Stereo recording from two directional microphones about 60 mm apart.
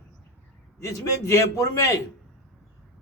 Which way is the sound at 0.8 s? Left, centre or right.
Left.